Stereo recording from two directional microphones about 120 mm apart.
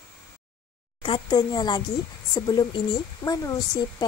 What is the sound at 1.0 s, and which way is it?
Speech, 40° left (ahead or behind).